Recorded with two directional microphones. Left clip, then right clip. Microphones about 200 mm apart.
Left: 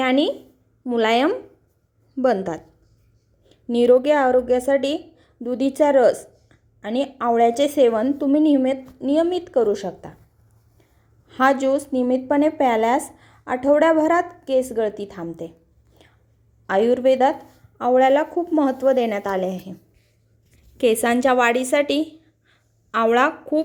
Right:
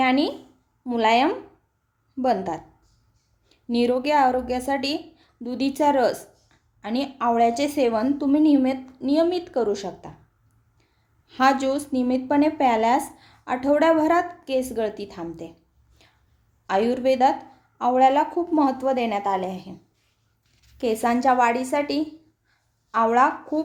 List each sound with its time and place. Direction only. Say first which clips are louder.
0.0 s a woman's voice: left 2 dB; 15° left (ahead or behind)
4.0 s a woman's voice: left 3 dB; 10° left (ahead or behind)
11.3 s a woman's voice: left 2 dB; 10° left (ahead or behind)
16.6 s a woman's voice: left 4 dB; 10° left (ahead or behind)
20.8 s a woman's voice: left 3 dB; 10° left (ahead or behind)
22.9 s speech: left 1 dB; 20° left (ahead or behind)